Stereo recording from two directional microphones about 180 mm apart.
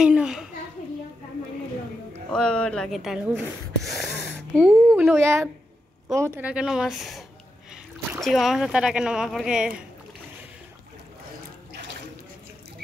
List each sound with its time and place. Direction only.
0.0 s a child's voice: 5° right (ahead or behind)
2.3 s speech: 5° left (ahead or behind)